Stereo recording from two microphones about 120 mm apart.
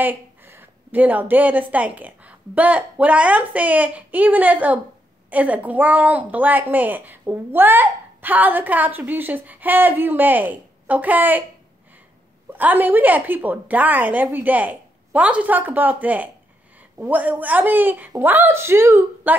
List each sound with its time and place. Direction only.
0.0 s a woman's voice: 15° right (ahead or behind)
12.5 s a woman's voice: 15° right (ahead or behind)